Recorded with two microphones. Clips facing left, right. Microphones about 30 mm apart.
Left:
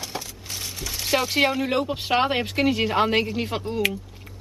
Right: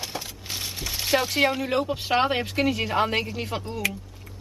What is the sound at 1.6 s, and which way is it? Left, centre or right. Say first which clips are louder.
Speech: left 1 dB; centre.